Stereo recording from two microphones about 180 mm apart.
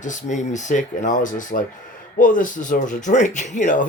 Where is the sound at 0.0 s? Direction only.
45° left (ahead or behind).